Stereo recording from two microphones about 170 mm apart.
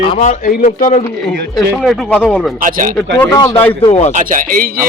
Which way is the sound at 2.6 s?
50° right (ahead or behind).